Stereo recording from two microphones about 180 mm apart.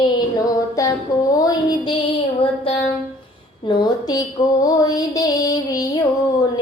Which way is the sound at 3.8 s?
20° left (ahead or behind).